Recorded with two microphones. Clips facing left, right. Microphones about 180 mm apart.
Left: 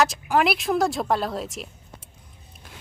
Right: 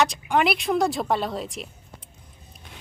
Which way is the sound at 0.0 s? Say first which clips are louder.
Left 1 dB; centre (ahead or behind).